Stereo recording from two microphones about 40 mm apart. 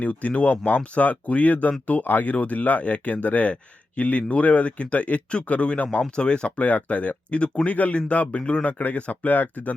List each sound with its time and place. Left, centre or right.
0.0 s speech: left
1.9 s speech: left
2.3 s speech: left
6.0 s speech: left
6.7 s speech: left
8.4 s speech: centre
8.6 s speech: left
9.3 s speech: left